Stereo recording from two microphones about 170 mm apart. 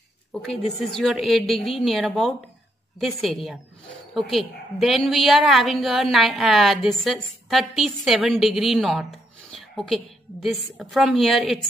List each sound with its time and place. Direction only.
0.3 s a woman's voice: 5° left (ahead or behind)